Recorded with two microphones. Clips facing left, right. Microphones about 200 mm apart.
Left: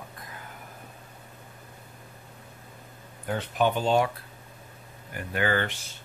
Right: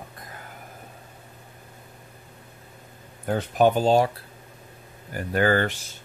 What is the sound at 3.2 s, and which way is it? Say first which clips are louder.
Speech: right 5 dB; 40° right (ahead or behind).